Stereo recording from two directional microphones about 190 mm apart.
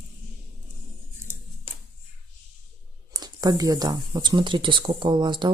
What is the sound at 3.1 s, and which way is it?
Speech, 20° right (ahead or behind).